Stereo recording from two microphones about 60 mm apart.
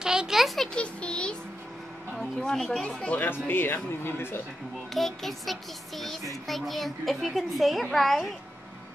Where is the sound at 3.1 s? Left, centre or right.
Left.